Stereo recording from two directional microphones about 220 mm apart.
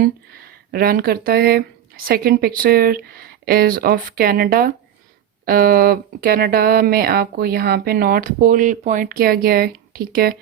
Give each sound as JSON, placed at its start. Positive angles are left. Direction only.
{"t": 0.0, "sound": "speech", "side_deg": -45}